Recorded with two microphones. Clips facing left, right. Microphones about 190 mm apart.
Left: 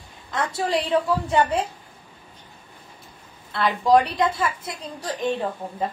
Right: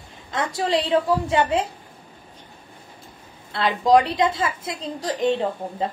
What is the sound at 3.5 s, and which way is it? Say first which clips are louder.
A woman's voice: right 1 dB; 20° right (ahead or behind).